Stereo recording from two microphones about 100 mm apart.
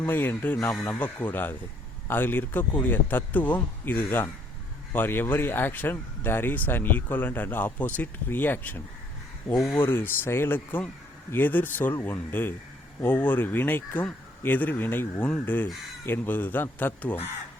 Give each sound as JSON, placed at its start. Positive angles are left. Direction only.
{"t": 0.0, "sound": "speech", "side_deg": 20}